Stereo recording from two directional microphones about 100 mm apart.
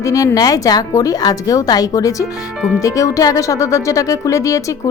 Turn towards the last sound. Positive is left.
turn(degrees=35)  # may be behind; listen again after turning